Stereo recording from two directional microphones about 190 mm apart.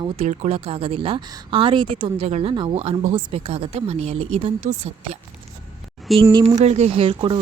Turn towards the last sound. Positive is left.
turn(degrees=-25)  # may be behind; listen again after turning